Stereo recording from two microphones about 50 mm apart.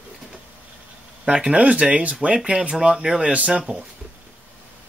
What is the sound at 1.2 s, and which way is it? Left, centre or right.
Speech, right.